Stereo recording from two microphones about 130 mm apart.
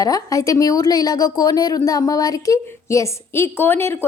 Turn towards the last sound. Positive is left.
turn(degrees=15)  # may be behind; listen again after turning